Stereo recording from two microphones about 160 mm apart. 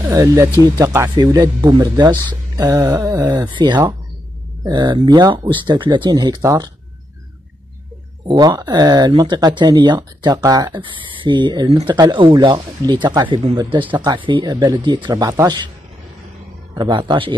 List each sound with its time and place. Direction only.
0.0 s speech: 20° right (ahead or behind)
8.3 s speech: 25° right (ahead or behind)
16.7 s speech: 30° right (ahead or behind)